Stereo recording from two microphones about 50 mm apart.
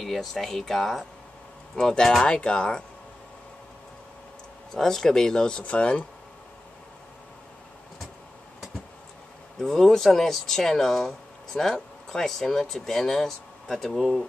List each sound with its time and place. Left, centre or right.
0.0 s speech: centre
4.7 s speech: centre
5.6 s speech: left
9.6 s speech: centre